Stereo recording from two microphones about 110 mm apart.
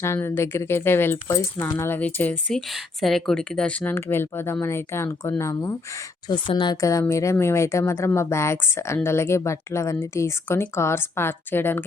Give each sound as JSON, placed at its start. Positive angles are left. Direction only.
{"t": 0.0, "sound": "speech", "side_deg": 25}
{"t": 2.0, "sound": "speech", "side_deg": 15}
{"t": 2.6, "sound": "speech", "side_deg": 0}
{"t": 6.2, "sound": "speech", "side_deg": 45}
{"t": 6.7, "sound": "speech", "side_deg": 30}